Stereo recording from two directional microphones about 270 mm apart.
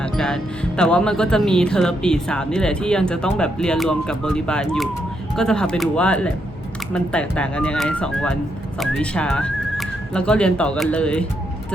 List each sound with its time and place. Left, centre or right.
0.0 s music: centre
0.8 s speech: centre